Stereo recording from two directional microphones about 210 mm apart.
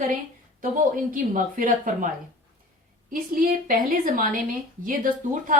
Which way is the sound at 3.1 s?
40° right (ahead or behind).